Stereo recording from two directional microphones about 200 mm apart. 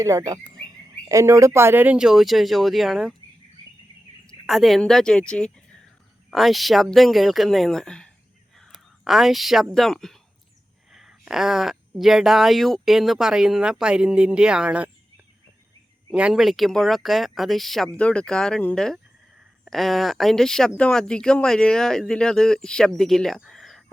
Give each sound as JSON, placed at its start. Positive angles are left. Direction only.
{"t": 0.0, "sound": "bird", "side_deg": -15}
{"t": 0.6, "sound": "speech", "side_deg": -20}
{"t": 4.4, "sound": "speech", "side_deg": 0}
{"t": 8.5, "sound": "whispering", "side_deg": 0}
{"t": 9.7, "sound": "speech", "side_deg": 0}
{"t": 16.0, "sound": "speech", "side_deg": -5}